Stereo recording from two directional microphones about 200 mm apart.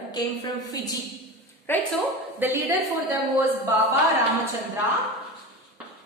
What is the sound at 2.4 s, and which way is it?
Speech, 10° right (ahead or behind).